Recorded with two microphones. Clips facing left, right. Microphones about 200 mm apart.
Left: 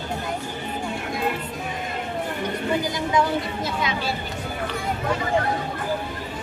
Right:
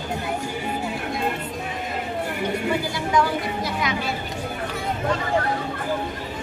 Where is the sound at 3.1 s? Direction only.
25° left (ahead or behind).